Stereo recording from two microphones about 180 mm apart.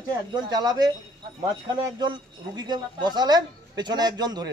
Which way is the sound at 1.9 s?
25° right (ahead or behind).